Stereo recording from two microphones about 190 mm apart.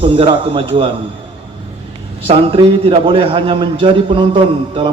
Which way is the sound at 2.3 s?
30° right (ahead or behind).